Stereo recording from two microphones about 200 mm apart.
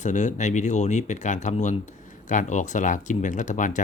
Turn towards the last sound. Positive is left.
turn(degrees=40)  # may be behind; listen again after turning